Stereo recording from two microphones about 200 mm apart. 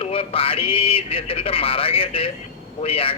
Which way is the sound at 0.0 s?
30° left (ahead or behind).